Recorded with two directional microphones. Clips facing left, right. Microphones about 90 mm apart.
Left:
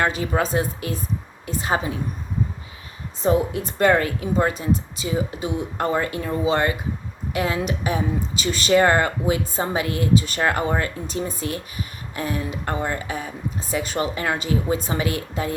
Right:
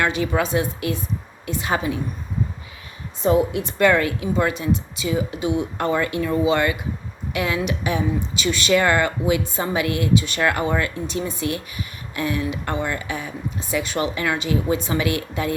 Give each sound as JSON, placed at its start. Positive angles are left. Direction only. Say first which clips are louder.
{"t": 0.0, "sound": "speech", "louder": "right 1 dB", "side_deg": 35}
{"t": 3.2, "sound": "speech", "louder": "right 2 dB", "side_deg": 30}